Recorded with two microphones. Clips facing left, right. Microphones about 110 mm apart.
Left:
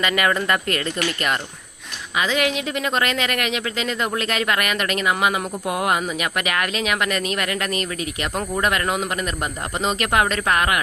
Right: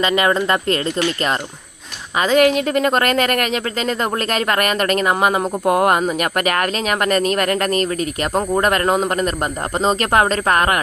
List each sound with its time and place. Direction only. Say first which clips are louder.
0.0 s speech: right 4 dB; 25° right (ahead or behind)
2.1 s a woman's voice: right 7 dB; 45° right (ahead or behind)